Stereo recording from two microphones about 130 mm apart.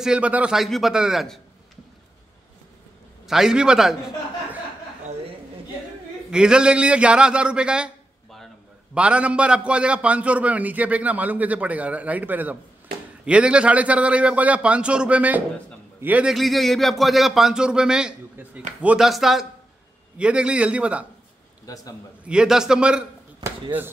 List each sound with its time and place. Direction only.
0.0 s a man's voice: 10° right (ahead or behind)
3.3 s a man's voice: 5° right (ahead or behind)
6.3 s a man's voice: 5° right (ahead or behind)
16.3 s a man's voice: centre (ahead or behind)
21.7 s a man's voice: 30° left (ahead or behind)
22.2 s a man's voice: 5° right (ahead or behind)